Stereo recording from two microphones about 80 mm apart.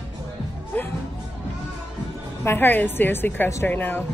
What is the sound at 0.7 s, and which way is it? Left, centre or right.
Music, centre.